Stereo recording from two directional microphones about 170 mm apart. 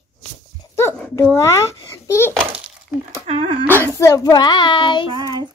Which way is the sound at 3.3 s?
30° right (ahead or behind).